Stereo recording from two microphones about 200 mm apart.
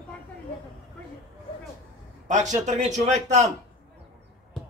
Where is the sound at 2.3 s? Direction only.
35° right (ahead or behind).